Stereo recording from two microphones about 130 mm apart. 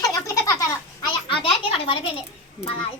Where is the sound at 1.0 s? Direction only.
40° left (ahead or behind).